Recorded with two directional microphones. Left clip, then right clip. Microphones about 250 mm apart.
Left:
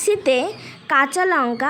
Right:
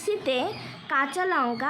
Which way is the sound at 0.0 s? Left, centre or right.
Left.